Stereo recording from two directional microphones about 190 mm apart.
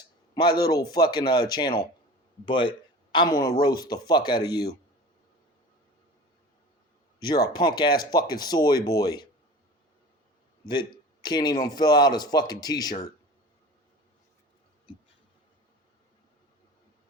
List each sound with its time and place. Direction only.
0.3 s a man's voice: 20° left (ahead or behind)
7.2 s a man's voice: 20° left (ahead or behind)
10.7 s a man's voice: 25° left (ahead or behind)